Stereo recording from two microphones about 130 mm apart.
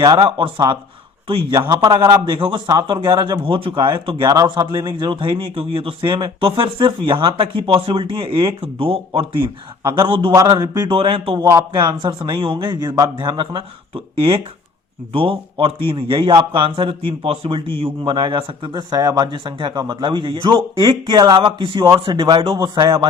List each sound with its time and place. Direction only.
0.0 s speech: 30° right (ahead or behind)
0.3 s speech: 40° right (ahead or behind)
1.5 s speech: 30° right (ahead or behind)
3.1 s speech: 30° right (ahead or behind)
10.9 s speech: 45° right (ahead or behind)
11.3 s speech: 25° right (ahead or behind)
11.7 s speech: 35° right (ahead or behind)
18.0 s speech: 35° right (ahead or behind)